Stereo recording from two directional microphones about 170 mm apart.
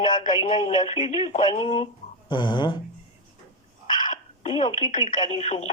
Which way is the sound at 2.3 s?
25° left (ahead or behind).